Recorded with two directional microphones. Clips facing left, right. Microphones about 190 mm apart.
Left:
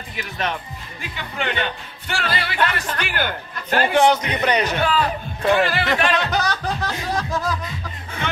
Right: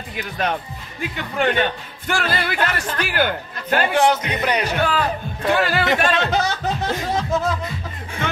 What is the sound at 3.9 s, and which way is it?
Speech, 5° right (ahead or behind).